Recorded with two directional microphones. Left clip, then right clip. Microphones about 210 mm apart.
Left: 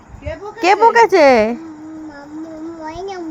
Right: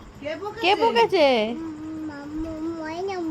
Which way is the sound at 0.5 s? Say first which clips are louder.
Left 9 dB; 25° left (ahead or behind).